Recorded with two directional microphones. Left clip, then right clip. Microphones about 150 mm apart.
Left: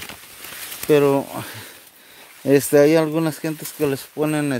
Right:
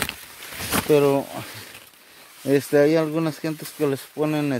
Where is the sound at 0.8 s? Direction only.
15° left (ahead or behind).